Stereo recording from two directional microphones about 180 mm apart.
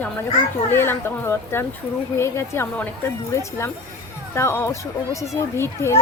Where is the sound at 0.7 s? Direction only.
15° left (ahead or behind).